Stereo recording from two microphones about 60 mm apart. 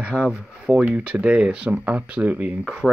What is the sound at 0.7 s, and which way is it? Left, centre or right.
Speech, centre.